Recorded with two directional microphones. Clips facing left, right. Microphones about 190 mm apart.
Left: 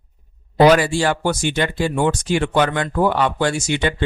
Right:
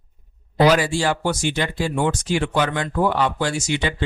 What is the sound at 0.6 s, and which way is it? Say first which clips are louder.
Speech: left 4 dB; 60° left (ahead or behind).